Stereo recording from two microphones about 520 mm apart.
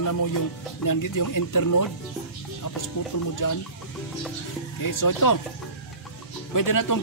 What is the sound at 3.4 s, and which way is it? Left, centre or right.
Speech, left.